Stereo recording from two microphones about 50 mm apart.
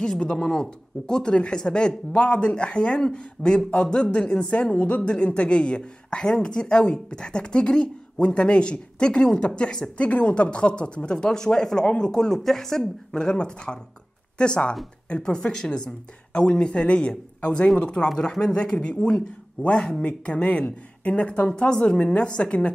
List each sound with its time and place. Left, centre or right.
0.0 s speech: centre